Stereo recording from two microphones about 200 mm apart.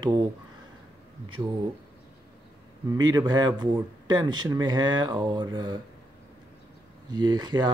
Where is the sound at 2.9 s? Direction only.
20° right (ahead or behind).